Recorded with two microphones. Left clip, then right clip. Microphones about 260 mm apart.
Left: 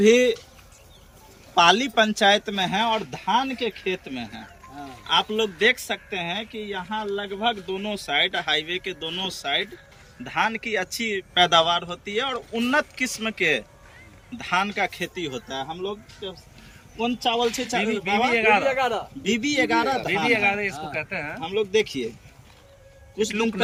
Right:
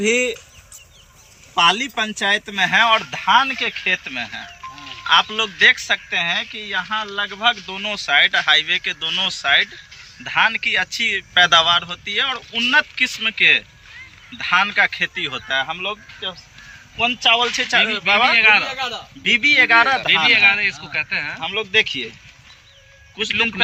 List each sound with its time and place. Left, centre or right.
0.0 s speech: centre
1.5 s speech: centre
15.7 s speech: right
17.2 s speech: centre
19.2 s speech: centre
23.1 s speech: centre